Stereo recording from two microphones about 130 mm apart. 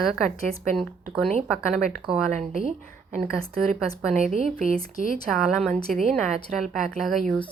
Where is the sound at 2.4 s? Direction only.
75° right (ahead or behind).